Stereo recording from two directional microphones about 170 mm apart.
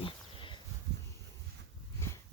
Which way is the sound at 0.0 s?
30° left (ahead or behind).